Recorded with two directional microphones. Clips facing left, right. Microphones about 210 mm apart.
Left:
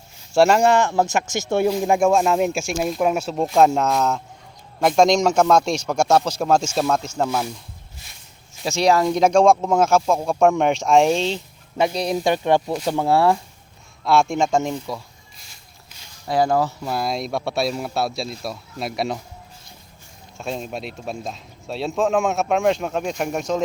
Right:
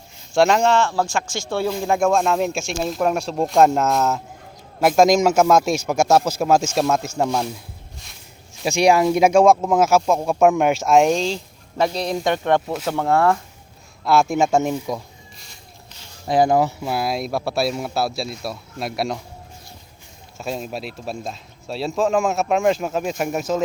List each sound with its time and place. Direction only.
0.3 s speech: 5° left (ahead or behind)
7.3 s speech: 5° left (ahead or behind)
8.6 s speech: 15° right (ahead or behind)
12.9 s speech: 10° left (ahead or behind)
14.0 s speech: centre (ahead or behind)
15.4 s a sound: centre (ahead or behind)
16.2 s speech: 15° right (ahead or behind); by 19.2 s centre (ahead or behind)
20.4 s speech: centre (ahead or behind)